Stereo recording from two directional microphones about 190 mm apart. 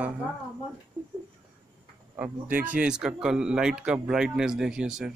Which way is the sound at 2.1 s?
10° right (ahead or behind).